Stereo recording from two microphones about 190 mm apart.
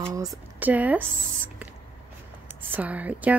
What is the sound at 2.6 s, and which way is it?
Speech, 10° right (ahead or behind).